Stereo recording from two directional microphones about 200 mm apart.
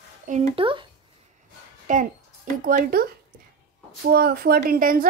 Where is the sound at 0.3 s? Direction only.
30° right (ahead or behind).